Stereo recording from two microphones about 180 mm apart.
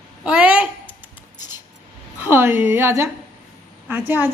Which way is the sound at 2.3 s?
10° right (ahead or behind).